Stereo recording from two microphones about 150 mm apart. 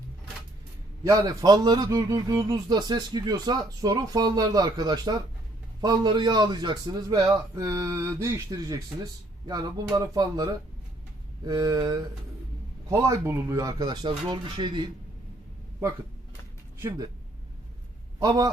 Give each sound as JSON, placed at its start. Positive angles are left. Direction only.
{"t": 1.3, "sound": "speech", "side_deg": -25}
{"t": 16.7, "sound": "speech", "side_deg": -20}
{"t": 18.2, "sound": "speech", "side_deg": -25}